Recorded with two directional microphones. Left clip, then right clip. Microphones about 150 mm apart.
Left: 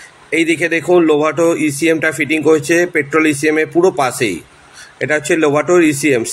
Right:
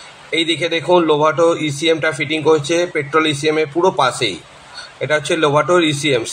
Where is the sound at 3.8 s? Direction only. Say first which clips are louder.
Left 2 dB; 50° left (ahead or behind).